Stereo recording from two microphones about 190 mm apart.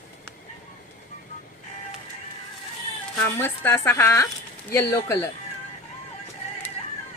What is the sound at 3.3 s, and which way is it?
A woman's voice, 10° left (ahead or behind).